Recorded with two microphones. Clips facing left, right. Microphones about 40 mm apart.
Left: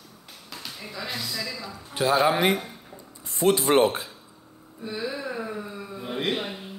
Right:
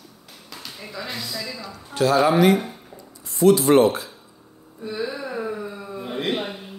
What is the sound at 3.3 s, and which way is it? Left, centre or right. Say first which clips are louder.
Speech: right 6 dB; left.